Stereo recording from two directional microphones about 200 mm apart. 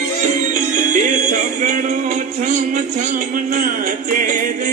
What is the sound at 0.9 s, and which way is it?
Music, 40° right (ahead or behind).